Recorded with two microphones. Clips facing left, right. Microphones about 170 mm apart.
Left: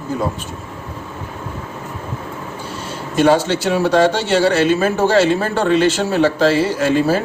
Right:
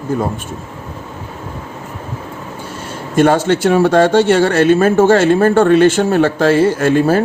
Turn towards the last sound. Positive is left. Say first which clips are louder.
# right 3 dB
turn(degrees=-55)  # may be behind; listen again after turning